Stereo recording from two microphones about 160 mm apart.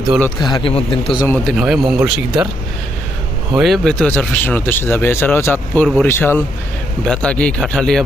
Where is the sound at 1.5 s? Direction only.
Centre (ahead or behind).